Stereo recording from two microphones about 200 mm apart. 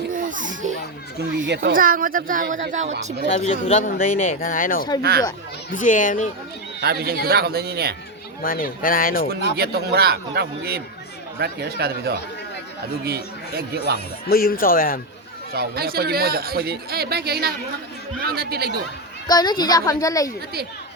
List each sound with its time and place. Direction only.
0.1 s a sound: 40° right (ahead or behind)
1.5 s speech: 45° right (ahead or behind)
3.3 s speech: 35° left (ahead or behind)
6.8 s speech: 50° right (ahead or behind)
8.4 s speech: 45° left (ahead or behind)
9.3 s speech: 50° right (ahead or behind)
14.3 s speech: 50° left (ahead or behind)
15.5 s speech: 50° right (ahead or behind)
19.3 s a woman's voice: 20° left (ahead or behind)